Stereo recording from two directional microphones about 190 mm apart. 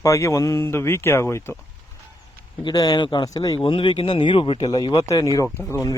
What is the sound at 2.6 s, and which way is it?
Speech, 20° left (ahead or behind).